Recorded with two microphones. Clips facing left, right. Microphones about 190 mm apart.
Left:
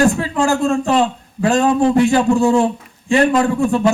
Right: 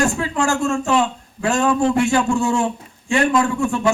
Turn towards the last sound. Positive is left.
turn(degrees=35)  # may be behind; listen again after turning